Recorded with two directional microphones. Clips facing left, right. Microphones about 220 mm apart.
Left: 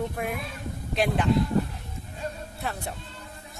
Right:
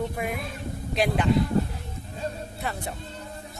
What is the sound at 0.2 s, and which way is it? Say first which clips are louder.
Speech: right 1 dB; centre (ahead or behind).